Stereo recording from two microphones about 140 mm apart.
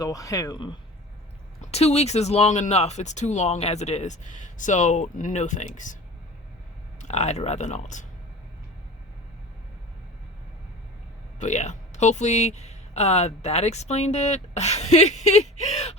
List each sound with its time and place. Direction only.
0.0 s speech: 25° left (ahead or behind)
1.6 s speech: 50° left (ahead or behind)
7.0 s speech: 55° left (ahead or behind)
11.3 s speech: 55° left (ahead or behind)